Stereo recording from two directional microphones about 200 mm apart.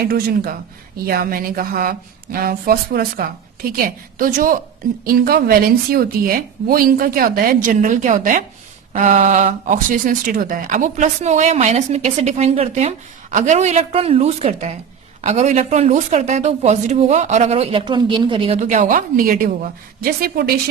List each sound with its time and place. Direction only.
0.1 s a woman's voice: 50° right (ahead or behind)